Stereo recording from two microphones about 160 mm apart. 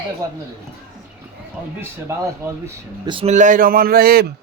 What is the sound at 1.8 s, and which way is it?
Speech, 20° right (ahead or behind).